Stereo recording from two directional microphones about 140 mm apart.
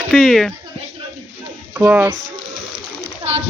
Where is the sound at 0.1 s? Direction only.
Centre (ahead or behind).